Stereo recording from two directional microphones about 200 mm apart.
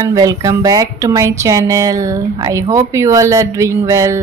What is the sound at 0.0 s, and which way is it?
Speech, 15° right (ahead or behind).